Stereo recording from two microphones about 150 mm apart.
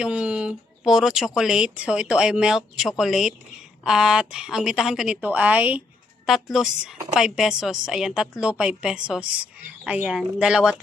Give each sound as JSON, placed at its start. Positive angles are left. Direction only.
{"t": 0.0, "sound": "a woman's voice", "side_deg": -5}